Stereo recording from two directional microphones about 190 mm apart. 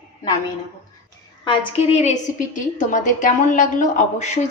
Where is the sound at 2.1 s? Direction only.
45° left (ahead or behind).